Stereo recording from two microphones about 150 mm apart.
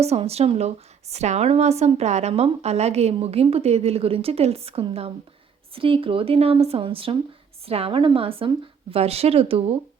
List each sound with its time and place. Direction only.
0.0 s a woman's voice: 45° right (ahead or behind)